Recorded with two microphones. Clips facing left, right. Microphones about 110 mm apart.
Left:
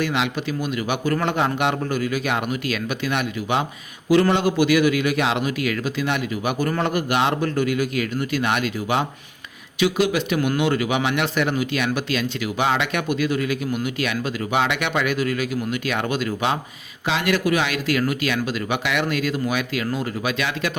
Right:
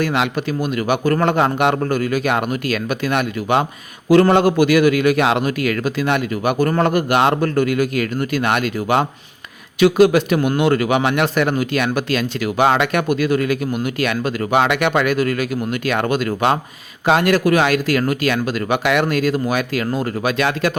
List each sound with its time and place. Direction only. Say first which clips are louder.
0.0 s speech: right 4 dB; 45° right (ahead or behind)